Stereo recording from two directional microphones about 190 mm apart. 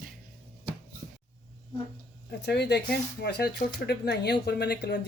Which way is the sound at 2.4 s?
60° left (ahead or behind).